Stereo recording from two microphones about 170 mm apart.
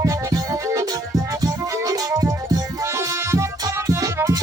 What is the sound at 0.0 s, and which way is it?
Music, 20° right (ahead or behind).